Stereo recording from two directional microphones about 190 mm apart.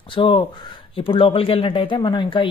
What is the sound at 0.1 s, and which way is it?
Speech, 25° left (ahead or behind).